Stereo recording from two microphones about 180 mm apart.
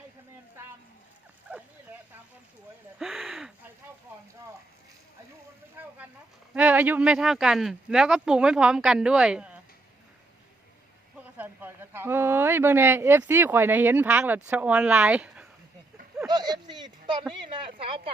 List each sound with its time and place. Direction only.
1.5 s a sound: 10° right (ahead or behind)
6.5 s speech: 5° right (ahead or behind)
11.2 s speech: 10° right (ahead or behind)
16.2 s a woman's voice: 25° right (ahead or behind)